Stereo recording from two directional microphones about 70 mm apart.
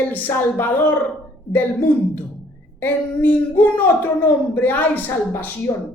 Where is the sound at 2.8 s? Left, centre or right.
Left.